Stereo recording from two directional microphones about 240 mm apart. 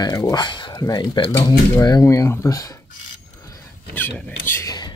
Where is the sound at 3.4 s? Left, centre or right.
Centre.